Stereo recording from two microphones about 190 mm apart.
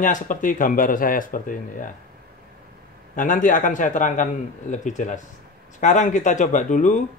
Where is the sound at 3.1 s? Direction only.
40° left (ahead or behind).